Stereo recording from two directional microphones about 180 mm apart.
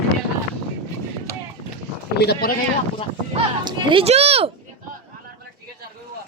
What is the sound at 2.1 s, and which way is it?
Speech, 65° left (ahead or behind).